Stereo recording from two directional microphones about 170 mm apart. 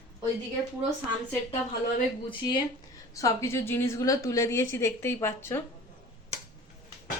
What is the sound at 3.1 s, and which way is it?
A woman's voice, 20° left (ahead or behind).